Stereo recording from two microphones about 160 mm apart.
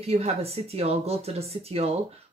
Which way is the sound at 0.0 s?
40° right (ahead or behind).